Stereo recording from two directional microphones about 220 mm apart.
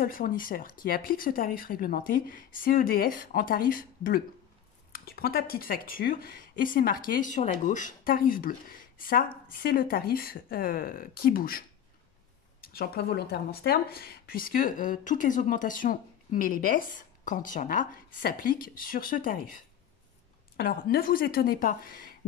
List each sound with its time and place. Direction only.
0.0 s speech: 40° left (ahead or behind)
12.6 s speech: 45° left (ahead or behind)